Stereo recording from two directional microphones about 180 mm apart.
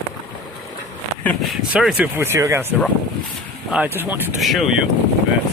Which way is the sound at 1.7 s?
5° right (ahead or behind).